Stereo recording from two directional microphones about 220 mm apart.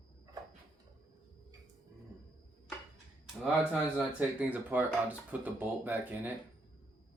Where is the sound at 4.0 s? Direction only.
5° right (ahead or behind).